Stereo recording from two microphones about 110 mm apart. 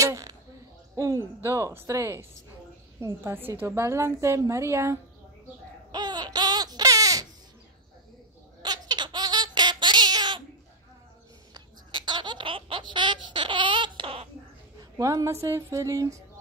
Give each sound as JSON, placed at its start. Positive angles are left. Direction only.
{"t": 0.0, "sound": "a sound", "side_deg": -30}
{"t": 0.9, "sound": "a woman's voice", "side_deg": -30}
{"t": 5.9, "sound": "baby cry", "side_deg": -40}
{"t": 8.6, "sound": "a sound", "side_deg": -40}
{"t": 11.5, "sound": "baby laughter", "side_deg": -40}
{"t": 14.8, "sound": "a woman's voice", "side_deg": -30}